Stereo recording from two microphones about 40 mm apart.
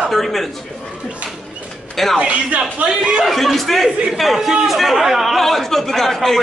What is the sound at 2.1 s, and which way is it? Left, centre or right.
Speech, right.